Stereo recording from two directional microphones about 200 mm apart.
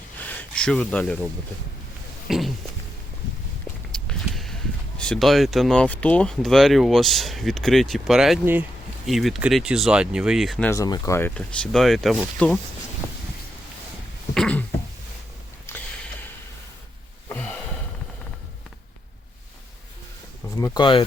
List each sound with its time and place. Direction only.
0.2 s a sound: 10° left (ahead or behind)
3.9 s walk: 5° left (ahead or behind)
4.9 s speech: 5° left (ahead or behind)
10.7 s speech: 20° left (ahead or behind); by 12.5 s centre (ahead or behind)
14.3 s cough: 5° left (ahead or behind)
15.7 s a sound: 10° left (ahead or behind)
17.2 s gasp: 5° left (ahead or behind)
20.7 s speech: 25° left (ahead or behind)